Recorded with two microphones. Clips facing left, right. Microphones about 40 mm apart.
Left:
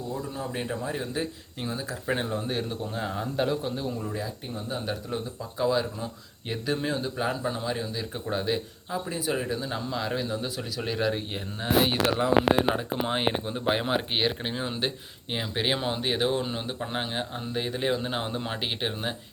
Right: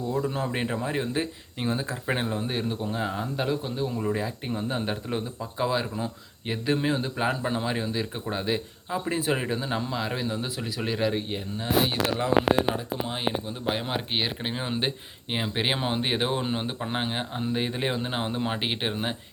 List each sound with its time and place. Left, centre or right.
0.1 s speech: right; by 3.9 s centre
4.0 s speech: right
5.4 s speech: centre
8.3 s speech: centre
9.0 s speech: right
9.9 s speech: centre
12.7 s speech: left
13.8 s speech: centre
14.4 s speech: centre